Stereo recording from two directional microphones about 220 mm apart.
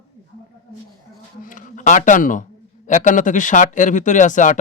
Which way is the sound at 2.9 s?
35° left (ahead or behind).